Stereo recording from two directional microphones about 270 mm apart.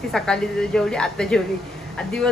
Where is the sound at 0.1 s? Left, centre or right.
Centre.